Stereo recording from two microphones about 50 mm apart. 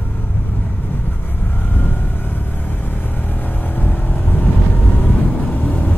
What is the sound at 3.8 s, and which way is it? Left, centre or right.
Vehicle, left.